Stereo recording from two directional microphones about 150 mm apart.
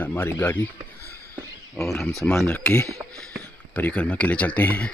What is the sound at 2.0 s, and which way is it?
Speech, centre (ahead or behind).